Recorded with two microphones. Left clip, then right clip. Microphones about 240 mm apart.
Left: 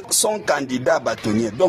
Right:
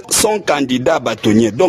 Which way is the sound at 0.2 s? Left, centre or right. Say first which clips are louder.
Right 6 dB; right.